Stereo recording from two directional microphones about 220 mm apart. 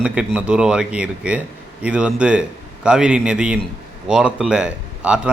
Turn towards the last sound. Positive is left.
turn(degrees=-5)  # may be behind; listen again after turning